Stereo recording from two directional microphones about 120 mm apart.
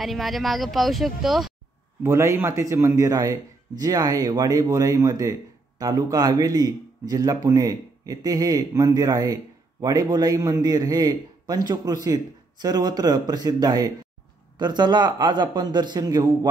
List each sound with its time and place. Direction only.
0.0 s speech: centre (ahead or behind)
2.0 s a man's voice: 25° right (ahead or behind)